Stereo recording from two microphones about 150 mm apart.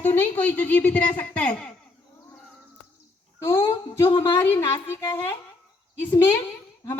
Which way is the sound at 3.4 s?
20° left (ahead or behind).